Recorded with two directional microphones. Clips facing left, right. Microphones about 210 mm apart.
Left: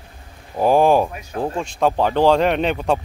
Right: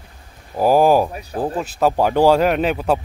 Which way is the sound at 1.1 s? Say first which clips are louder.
Right 3 dB; 35° right (ahead or behind).